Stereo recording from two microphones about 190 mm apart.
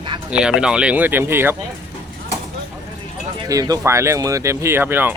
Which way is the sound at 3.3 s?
20° right (ahead or behind).